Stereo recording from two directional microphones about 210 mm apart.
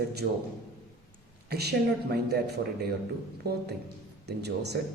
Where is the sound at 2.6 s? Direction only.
60° right (ahead or behind).